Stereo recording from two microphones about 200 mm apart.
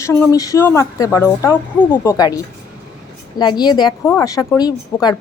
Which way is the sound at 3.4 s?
20° left (ahead or behind).